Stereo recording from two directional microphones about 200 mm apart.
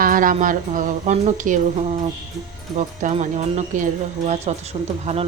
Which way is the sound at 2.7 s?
35° right (ahead or behind).